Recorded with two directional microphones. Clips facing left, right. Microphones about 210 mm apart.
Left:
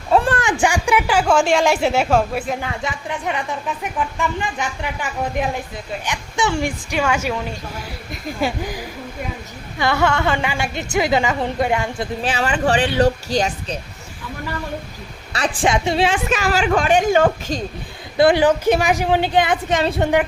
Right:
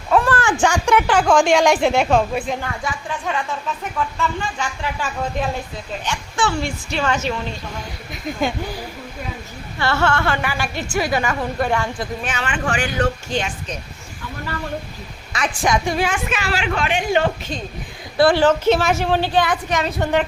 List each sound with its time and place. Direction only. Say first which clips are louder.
0.1 s a sound: left 1 dB; 30° left (ahead or behind)
0.6 s a woman's voice: right 1 dB; 10° left (ahead or behind)
2.6 s a woman's voice: left 1 dB; 20° left (ahead or behind)
12.2 s a woman's voice: left 8 dB; 35° left (ahead or behind)
15.3 s a woman's voice: left 1 dB; 35° left (ahead or behind)
16.3 s a woman's voice: left 5 dB; 40° left (ahead or behind)
18.2 s a woman's voice: left 1 dB; 20° left (ahead or behind)